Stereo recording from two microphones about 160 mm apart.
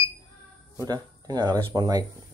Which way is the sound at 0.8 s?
25° right (ahead or behind).